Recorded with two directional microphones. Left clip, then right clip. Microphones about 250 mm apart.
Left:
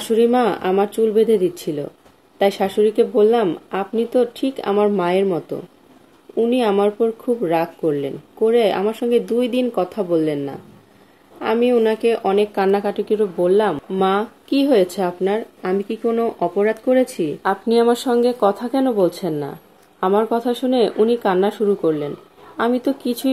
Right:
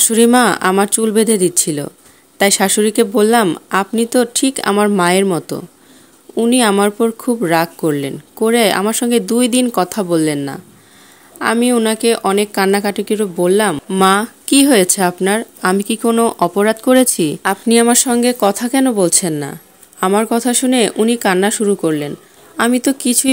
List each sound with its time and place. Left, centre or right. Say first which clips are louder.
0.0 s speech: right 4 dB; right
17.6 s speech: right 3 dB; right
18.6 s speech: right 3 dB; right